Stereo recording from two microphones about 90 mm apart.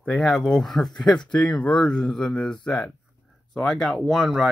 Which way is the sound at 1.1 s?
55° left (ahead or behind).